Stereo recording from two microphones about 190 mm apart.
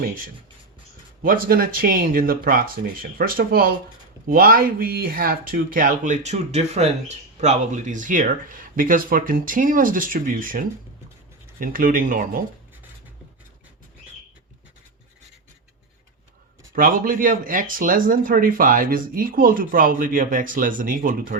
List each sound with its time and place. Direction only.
1.2 s speech: 50° right (ahead or behind)
16.7 s speech: 45° right (ahead or behind)